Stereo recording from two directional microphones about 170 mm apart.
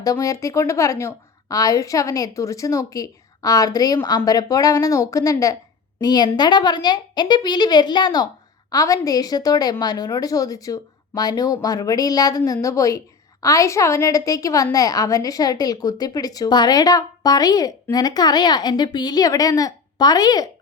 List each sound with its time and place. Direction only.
0.0 s a woman's voice: 20° left (ahead or behind)